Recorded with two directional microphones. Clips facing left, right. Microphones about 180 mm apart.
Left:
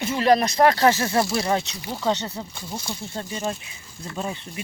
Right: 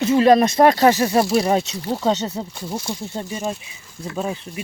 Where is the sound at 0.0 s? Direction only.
20° right (ahead or behind).